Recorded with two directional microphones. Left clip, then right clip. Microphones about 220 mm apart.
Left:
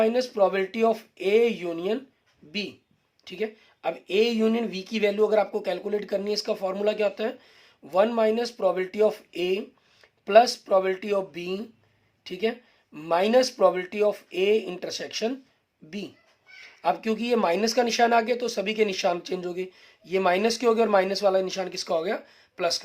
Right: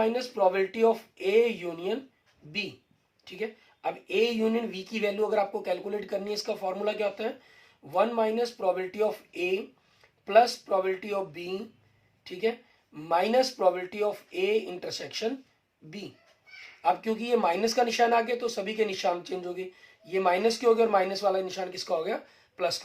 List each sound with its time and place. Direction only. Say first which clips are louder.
0.0 s speech: left 3 dB; 50° left (ahead or behind)
3.2 s speech: left 4 dB; 50° left (ahead or behind)
16.8 s speech: left 1 dB; 50° left (ahead or behind)